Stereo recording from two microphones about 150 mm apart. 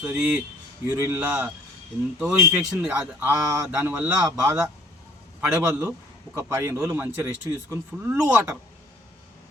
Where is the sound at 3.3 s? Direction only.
20° right (ahead or behind).